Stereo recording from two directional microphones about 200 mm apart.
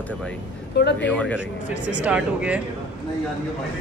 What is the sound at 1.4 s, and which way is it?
A man's voice, 5° right (ahead or behind).